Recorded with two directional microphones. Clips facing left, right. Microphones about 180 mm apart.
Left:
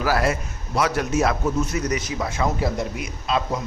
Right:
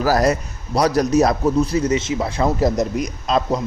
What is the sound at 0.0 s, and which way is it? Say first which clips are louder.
A man's voice: right 5 dB; 40° right (ahead or behind).